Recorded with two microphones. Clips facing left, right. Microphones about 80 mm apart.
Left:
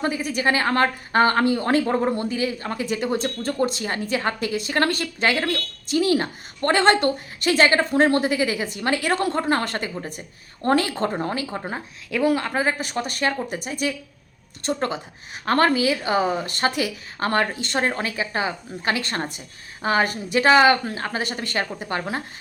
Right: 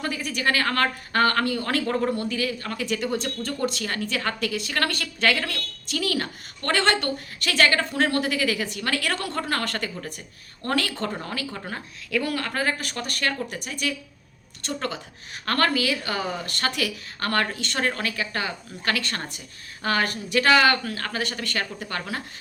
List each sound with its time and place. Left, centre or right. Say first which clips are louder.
0.0 s a woman's voice: left 4 dB; left